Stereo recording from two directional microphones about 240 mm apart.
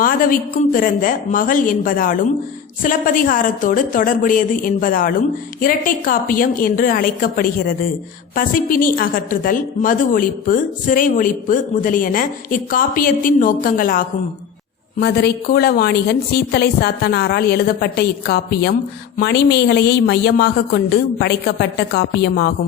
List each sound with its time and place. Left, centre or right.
0.0 s a woman's voice: left